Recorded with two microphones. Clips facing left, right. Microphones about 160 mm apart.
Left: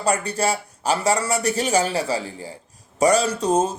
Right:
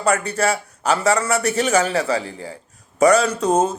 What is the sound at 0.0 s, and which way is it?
A man's voice, 30° left (ahead or behind).